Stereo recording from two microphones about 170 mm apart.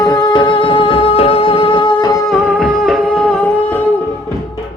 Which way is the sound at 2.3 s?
Centre (ahead or behind).